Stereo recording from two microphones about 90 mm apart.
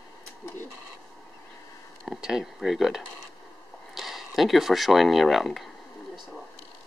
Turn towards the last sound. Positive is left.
turn(degrees=0)  # may be behind; listen again after turning